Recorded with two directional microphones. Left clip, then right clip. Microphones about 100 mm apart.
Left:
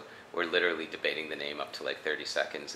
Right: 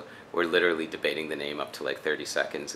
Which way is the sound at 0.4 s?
20° right (ahead or behind).